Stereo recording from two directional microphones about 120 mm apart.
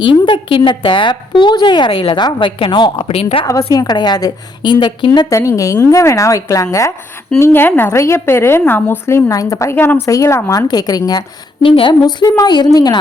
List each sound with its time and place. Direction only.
0.0 s a woman's voice: 45° left (ahead or behind)
3.1 s a woman's voice: 55° left (ahead or behind)
3.7 s a woman's voice: 35° left (ahead or behind)
5.2 s a woman's voice: 25° left (ahead or behind)
9.7 s a woman's voice: 15° left (ahead or behind)
10.1 s a woman's voice: 25° left (ahead or behind)
10.7 s a woman's voice: 35° left (ahead or behind)
11.6 s a woman's voice: 45° left (ahead or behind)